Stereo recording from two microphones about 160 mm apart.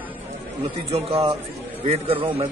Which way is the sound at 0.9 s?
35° right (ahead or behind).